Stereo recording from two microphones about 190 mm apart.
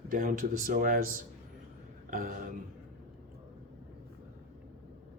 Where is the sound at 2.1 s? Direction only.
50° right (ahead or behind).